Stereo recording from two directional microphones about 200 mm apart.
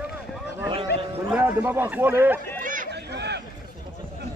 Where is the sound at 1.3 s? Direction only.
10° right (ahead or behind).